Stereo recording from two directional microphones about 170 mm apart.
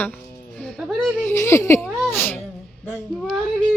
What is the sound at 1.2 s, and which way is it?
Speech, 15° left (ahead or behind).